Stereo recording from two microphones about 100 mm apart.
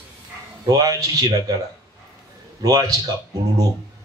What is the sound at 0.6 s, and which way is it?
Speech, 40° right (ahead or behind).